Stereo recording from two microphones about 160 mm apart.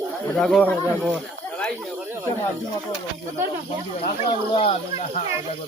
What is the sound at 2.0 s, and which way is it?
Speech, 15° right (ahead or behind).